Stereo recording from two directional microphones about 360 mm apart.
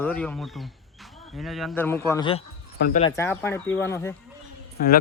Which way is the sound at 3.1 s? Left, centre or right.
Centre.